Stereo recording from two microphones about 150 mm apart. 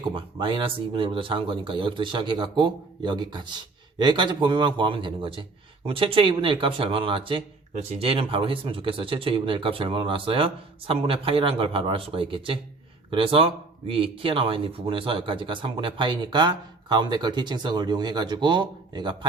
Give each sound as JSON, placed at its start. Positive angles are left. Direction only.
{"t": 0.3, "sound": "speech", "side_deg": -35}